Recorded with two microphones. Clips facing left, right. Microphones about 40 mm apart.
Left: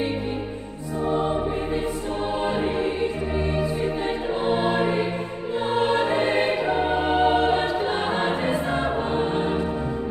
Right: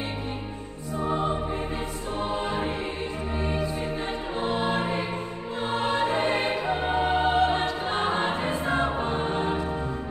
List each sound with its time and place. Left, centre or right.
4.5 s music: centre
6.8 s music: centre
7.2 s choir: left